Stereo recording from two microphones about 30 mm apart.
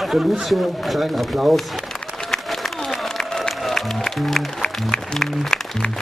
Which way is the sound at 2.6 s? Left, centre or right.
Centre.